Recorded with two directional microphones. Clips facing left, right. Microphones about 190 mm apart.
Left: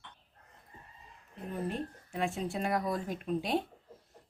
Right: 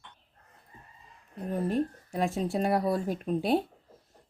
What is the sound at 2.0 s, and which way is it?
A woman's voice, 40° right (ahead or behind).